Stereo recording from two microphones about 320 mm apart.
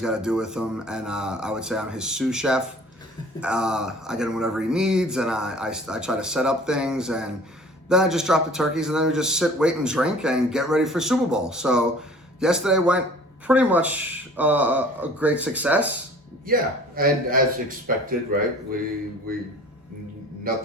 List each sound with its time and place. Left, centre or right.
0.0 s a man's voice: centre
16.5 s a man's voice: right
20.5 s a man's voice: right